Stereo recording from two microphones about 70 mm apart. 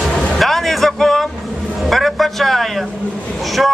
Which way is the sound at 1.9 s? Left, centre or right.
Centre.